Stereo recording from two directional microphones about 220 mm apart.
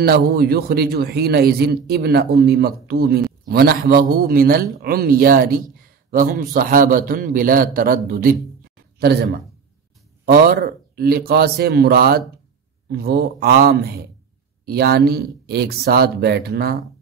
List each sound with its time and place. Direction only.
0.0 s a man's voice: 45° right (ahead or behind)